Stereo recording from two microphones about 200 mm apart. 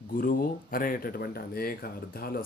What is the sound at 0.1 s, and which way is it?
Speech, 45° left (ahead or behind).